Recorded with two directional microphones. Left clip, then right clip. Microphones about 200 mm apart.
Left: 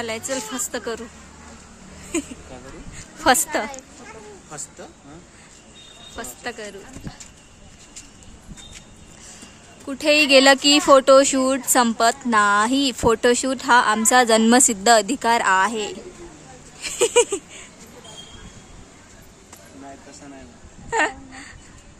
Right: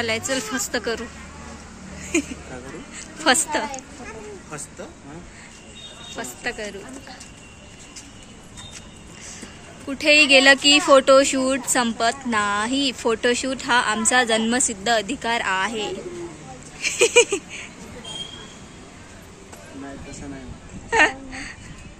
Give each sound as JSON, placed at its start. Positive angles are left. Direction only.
{"t": 0.0, "sound": "a woman's voice", "side_deg": 20}
{"t": 3.3, "sound": "speech", "side_deg": 30}
{"t": 6.1, "sound": "a woman's voice", "side_deg": 25}
{"t": 9.8, "sound": "speech", "side_deg": 35}
{"t": 16.8, "sound": "a sound", "side_deg": 25}
{"t": 20.9, "sound": "babbling", "side_deg": 15}